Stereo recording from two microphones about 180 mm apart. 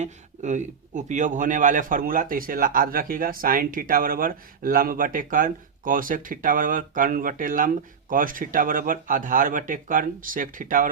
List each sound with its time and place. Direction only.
0.0 s a man's voice: 40° right (ahead or behind)